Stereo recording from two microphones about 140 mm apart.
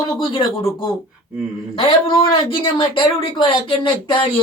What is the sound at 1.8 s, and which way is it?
Speech, 40° left (ahead or behind).